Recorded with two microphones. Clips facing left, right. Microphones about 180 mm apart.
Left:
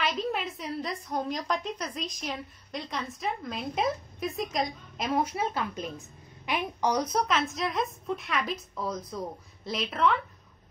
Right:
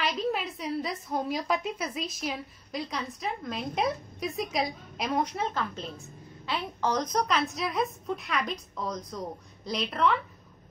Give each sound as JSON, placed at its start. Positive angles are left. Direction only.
{"t": 0.0, "sound": "a woman's voice", "side_deg": 0}